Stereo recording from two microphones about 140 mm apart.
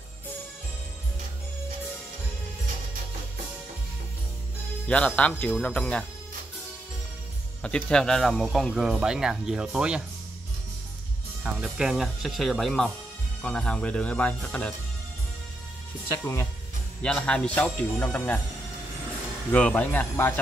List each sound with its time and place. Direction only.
4.8 s a man's voice: 10° left (ahead or behind)
7.6 s speech: 5° left (ahead or behind)
11.4 s a man's voice: 5° right (ahead or behind)
16.1 s speech: 20° left (ahead or behind)
17.0 s a man's voice: 5° left (ahead or behind)
19.5 s a man's voice: 10° left (ahead or behind)